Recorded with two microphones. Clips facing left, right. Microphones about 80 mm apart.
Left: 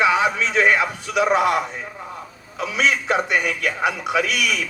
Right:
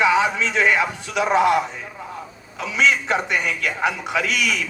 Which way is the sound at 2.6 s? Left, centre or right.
Left.